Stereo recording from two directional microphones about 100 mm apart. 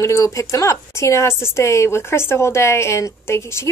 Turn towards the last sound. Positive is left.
turn(degrees=25)  # may be behind; listen again after turning